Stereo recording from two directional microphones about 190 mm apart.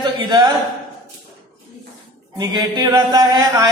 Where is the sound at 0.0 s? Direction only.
20° right (ahead or behind).